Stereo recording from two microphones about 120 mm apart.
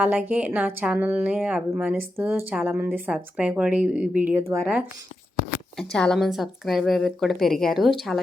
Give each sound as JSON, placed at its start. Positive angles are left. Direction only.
{"t": 0.0, "sound": "speech", "side_deg": -15}
{"t": 5.7, "sound": "a woman's voice", "side_deg": 5}